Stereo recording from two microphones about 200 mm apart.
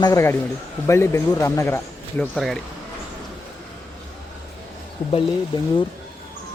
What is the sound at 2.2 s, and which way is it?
Speech, centre (ahead or behind).